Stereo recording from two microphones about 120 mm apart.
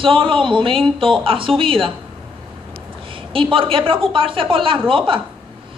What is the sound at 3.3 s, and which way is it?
A woman's voice, 45° right (ahead or behind).